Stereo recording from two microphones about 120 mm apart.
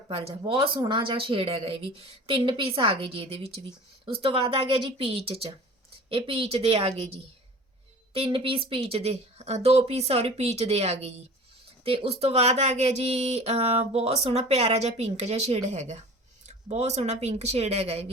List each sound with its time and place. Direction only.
0.1 s speech: 55° right (ahead or behind)
3.7 s speech: 45° right (ahead or behind)